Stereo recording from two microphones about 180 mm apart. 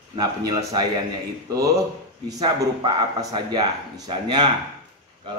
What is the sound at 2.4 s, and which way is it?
A man's voice, 20° right (ahead or behind).